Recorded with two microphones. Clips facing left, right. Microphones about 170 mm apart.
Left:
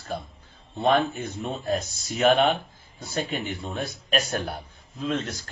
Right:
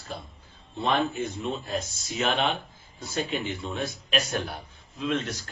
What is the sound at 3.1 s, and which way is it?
Speech, 45° left (ahead or behind).